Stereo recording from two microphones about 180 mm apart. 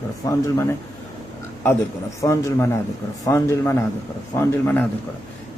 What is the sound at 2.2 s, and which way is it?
A man's voice, 15° left (ahead or behind).